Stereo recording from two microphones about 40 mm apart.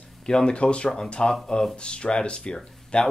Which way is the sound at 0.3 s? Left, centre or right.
Left.